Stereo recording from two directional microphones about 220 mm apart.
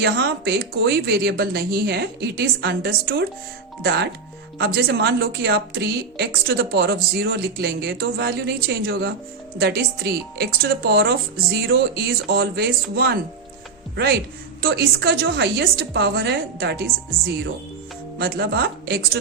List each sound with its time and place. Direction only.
0.0 s speech: 50° right (ahead or behind)
18.2 s speech: 45° right (ahead or behind)